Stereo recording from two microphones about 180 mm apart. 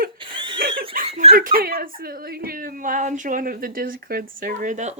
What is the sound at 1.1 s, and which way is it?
Speech, 35° right (ahead or behind).